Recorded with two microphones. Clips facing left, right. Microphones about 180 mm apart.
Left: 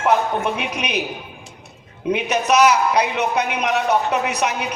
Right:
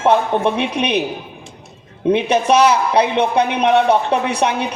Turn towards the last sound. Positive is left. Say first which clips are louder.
# right 3 dB
turn(degrees=-30)  # may be behind; listen again after turning